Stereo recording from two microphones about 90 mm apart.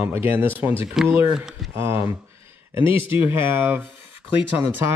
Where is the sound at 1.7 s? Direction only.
30° right (ahead or behind).